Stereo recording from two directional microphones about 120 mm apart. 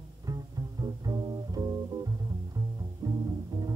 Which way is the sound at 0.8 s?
35° right (ahead or behind).